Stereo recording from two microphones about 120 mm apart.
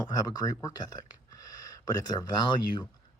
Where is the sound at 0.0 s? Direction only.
35° left (ahead or behind).